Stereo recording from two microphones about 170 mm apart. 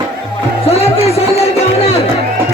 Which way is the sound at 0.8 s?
35° left (ahead or behind).